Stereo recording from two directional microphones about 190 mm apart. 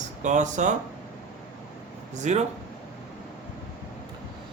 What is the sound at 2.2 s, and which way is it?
Speech, 40° right (ahead or behind).